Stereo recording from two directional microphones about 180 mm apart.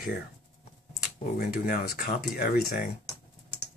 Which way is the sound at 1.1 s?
55° left (ahead or behind).